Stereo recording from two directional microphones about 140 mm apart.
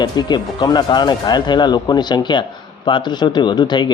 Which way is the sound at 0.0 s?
30° left (ahead or behind).